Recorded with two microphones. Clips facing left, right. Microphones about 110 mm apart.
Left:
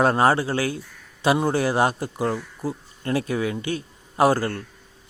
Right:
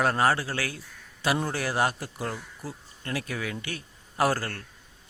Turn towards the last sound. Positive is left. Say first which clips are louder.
# left 7 dB
turn(degrees=20)  # may be behind; listen again after turning